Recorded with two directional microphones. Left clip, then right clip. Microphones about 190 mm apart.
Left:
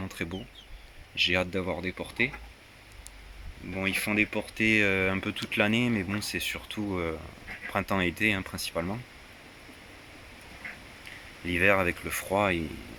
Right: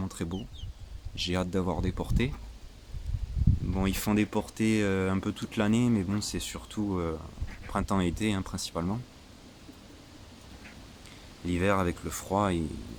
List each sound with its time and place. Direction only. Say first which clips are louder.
0.0 s chicken: left 2 dB; 10° right (ahead or behind)
1.1 s speech: left 5 dB; 10° right (ahead or behind)
3.8 s speech: left 4 dB; 20° right (ahead or behind)
4.6 s speech: left 5 dB; 5° right (ahead or behind)
11.4 s speech: left 4 dB; 5° right (ahead or behind)